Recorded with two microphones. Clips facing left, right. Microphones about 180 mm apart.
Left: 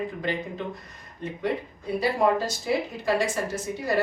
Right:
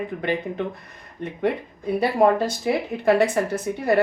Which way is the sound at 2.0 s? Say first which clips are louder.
Right 4 dB; 55° right (ahead or behind).